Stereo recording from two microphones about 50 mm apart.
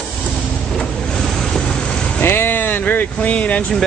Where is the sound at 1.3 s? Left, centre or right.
Centre.